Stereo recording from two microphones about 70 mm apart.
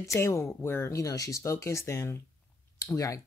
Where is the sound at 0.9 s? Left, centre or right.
Left.